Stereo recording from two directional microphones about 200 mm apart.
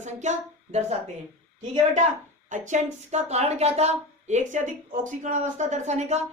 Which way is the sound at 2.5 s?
40° right (ahead or behind).